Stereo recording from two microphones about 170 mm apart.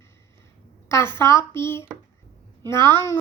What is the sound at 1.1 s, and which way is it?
Speech, 15° left (ahead or behind).